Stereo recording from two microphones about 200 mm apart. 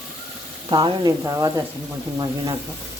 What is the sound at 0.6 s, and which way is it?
Speech, 20° right (ahead or behind).